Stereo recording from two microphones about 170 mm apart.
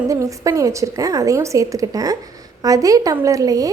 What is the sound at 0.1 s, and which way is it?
A woman's voice, 20° right (ahead or behind).